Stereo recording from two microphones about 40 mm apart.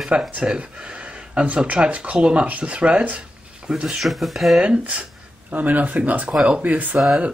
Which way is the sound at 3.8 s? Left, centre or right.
Centre.